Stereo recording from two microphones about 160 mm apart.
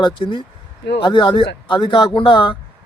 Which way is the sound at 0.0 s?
30° left (ahead or behind).